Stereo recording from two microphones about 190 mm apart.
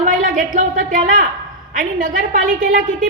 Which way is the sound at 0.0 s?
45° right (ahead or behind).